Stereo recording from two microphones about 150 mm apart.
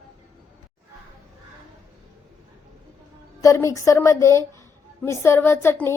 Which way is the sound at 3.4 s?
20° left (ahead or behind).